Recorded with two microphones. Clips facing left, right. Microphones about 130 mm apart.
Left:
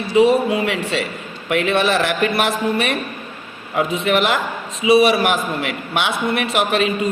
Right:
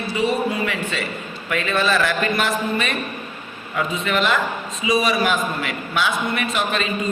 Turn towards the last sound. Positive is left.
turn(degrees=70)  # may be behind; listen again after turning